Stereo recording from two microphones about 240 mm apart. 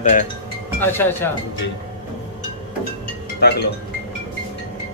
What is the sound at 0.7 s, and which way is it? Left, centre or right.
Speech, centre.